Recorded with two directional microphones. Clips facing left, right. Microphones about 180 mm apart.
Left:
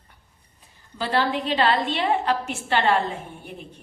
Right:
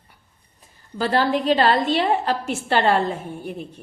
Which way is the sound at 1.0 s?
40° right (ahead or behind).